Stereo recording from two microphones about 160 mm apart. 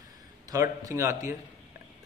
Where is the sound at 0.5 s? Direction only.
20° right (ahead or behind).